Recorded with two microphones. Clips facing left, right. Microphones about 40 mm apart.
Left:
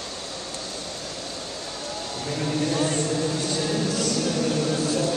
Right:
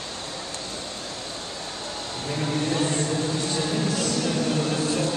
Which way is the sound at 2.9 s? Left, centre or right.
Right.